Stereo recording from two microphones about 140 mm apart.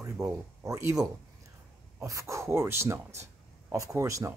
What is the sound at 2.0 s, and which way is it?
Speech, 20° right (ahead or behind).